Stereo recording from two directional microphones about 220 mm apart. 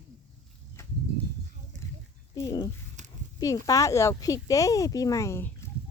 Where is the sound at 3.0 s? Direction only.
35° right (ahead or behind).